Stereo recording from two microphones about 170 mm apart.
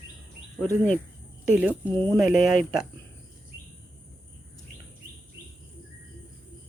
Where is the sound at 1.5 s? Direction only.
10° right (ahead or behind).